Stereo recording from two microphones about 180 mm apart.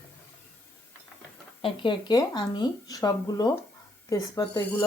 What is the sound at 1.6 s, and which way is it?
Speech, 30° left (ahead or behind).